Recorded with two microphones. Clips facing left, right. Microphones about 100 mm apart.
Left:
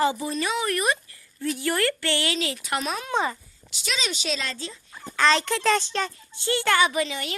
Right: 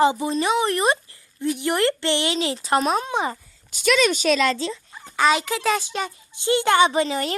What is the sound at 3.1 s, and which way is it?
Speech, 15° right (ahead or behind).